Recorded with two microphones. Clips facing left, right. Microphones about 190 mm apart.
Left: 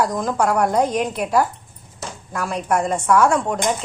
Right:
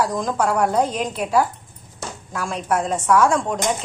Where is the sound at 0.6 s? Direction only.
10° left (ahead or behind).